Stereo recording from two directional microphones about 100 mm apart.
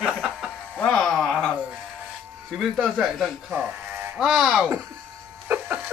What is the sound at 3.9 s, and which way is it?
Electric shaver, 25° right (ahead or behind).